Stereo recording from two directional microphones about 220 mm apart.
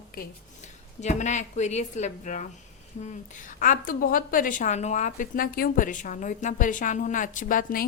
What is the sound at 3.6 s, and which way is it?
A woman's voice, 40° left (ahead or behind).